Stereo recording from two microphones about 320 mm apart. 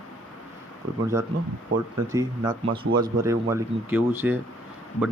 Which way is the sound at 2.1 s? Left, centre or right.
Centre.